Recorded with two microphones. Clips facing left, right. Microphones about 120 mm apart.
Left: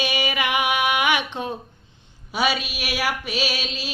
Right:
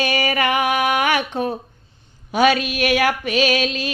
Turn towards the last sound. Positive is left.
turn(degrees=-50)  # may be behind; listen again after turning